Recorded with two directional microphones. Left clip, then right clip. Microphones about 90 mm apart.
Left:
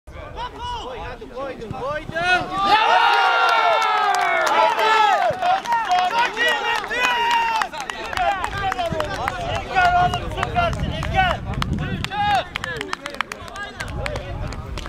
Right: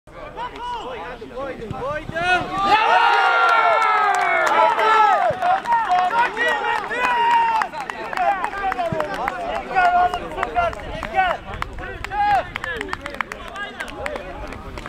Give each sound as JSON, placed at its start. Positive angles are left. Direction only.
{"t": 1.4, "sound": "a sound", "side_deg": 25}
{"t": 4.6, "sound": "run", "side_deg": 40}
{"t": 7.0, "sound": "run", "side_deg": 45}
{"t": 7.2, "sound": "run", "side_deg": 30}
{"t": 8.6, "sound": "run", "side_deg": 45}
{"t": 8.9, "sound": "run", "side_deg": 30}
{"t": 10.3, "sound": "run", "side_deg": 45}
{"t": 11.8, "sound": "chop", "side_deg": 45}
{"t": 12.6, "sound": "run", "side_deg": 25}